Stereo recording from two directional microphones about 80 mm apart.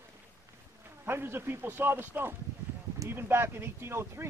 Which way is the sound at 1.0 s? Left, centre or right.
Right.